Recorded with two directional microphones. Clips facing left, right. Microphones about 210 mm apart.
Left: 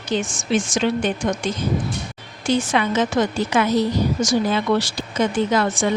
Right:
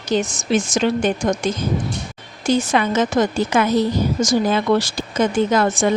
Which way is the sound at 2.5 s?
45° right (ahead or behind).